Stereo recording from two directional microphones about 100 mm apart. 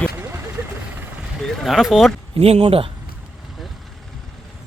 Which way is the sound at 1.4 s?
Centre (ahead or behind).